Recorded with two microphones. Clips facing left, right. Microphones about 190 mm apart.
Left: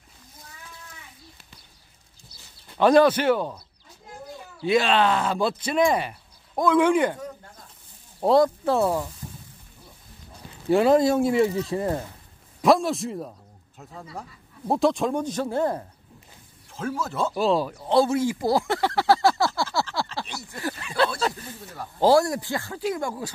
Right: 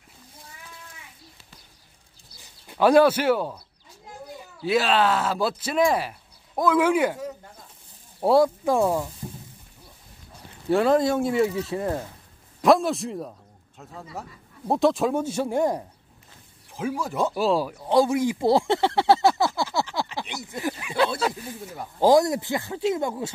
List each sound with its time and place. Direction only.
2.7 s speech: 10° right (ahead or behind)
4.6 s speech: 5° right (ahead or behind)
10.7 s speech: 5° left (ahead or behind); by 23.3 s 25° right (ahead or behind)